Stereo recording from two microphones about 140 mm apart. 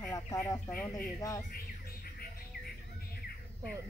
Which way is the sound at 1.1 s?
25° left (ahead or behind).